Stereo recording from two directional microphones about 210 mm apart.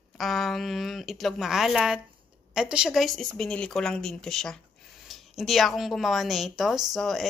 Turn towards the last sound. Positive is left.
turn(degrees=0)  # may be behind; listen again after turning